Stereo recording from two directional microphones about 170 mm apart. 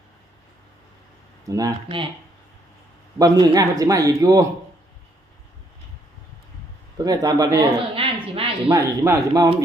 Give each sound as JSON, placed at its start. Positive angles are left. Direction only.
{"t": 1.5, "sound": "speech", "side_deg": -20}
{"t": 3.2, "sound": "speech", "side_deg": -20}
{"t": 7.0, "sound": "speech", "side_deg": -20}
{"t": 7.9, "sound": "a sound", "side_deg": -35}
{"t": 8.7, "sound": "speech", "side_deg": -20}